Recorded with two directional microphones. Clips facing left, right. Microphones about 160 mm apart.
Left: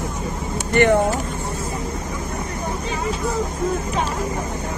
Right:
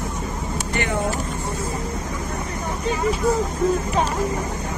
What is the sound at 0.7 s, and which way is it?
Speech, 60° left (ahead or behind).